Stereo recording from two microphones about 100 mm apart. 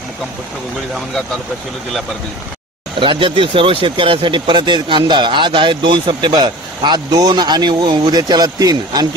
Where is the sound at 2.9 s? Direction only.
55° right (ahead or behind).